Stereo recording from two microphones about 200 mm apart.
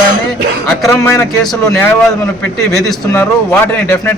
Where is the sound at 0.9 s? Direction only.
15° left (ahead or behind).